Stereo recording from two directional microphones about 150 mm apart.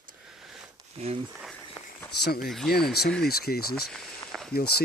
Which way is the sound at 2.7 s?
90° left.